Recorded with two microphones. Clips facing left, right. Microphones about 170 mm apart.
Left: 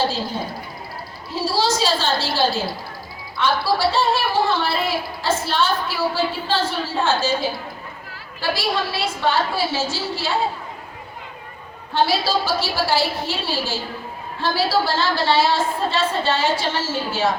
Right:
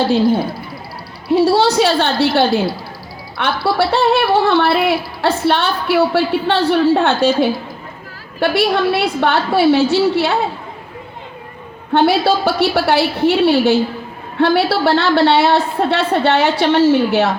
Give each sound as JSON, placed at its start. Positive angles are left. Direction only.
{"t": 1.3, "sound": "speech", "side_deg": -60}
{"t": 11.9, "sound": "speech", "side_deg": -60}